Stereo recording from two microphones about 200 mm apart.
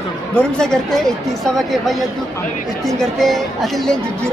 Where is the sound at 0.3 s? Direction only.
5° left (ahead or behind).